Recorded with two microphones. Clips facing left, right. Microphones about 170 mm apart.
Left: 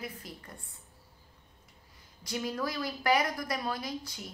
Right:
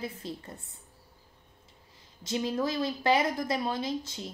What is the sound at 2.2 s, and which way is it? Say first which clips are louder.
A woman's voice: right 4 dB; 25° right (ahead or behind).